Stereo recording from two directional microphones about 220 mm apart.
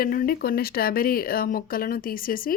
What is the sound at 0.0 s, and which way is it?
Speech, 40° left (ahead or behind).